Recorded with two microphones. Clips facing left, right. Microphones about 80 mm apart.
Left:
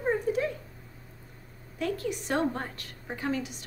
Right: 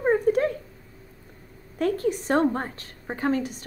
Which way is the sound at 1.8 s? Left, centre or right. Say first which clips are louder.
Right 7 dB; right.